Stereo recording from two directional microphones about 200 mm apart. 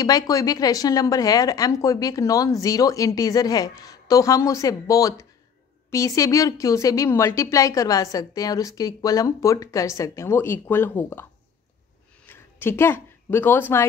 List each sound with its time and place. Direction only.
0.0 s speech: 20° left (ahead or behind)
12.3 s speech: 10° left (ahead or behind)